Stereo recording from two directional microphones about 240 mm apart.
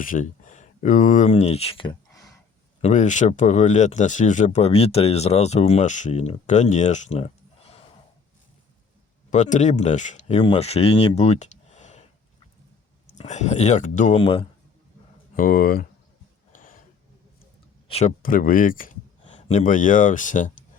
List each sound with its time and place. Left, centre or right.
0.0 s speech: left; by 2.3 s centre
2.8 s speech: left
9.3 s speech: left
13.1 s speech: left
15.4 s speech: left
16.5 s a sound: left
17.8 s speech: left